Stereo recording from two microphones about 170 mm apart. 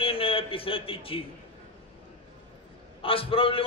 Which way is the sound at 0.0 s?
35° left (ahead or behind).